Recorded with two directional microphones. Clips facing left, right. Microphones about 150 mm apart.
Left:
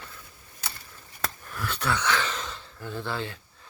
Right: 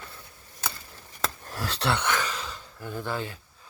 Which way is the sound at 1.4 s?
35° right (ahead or behind).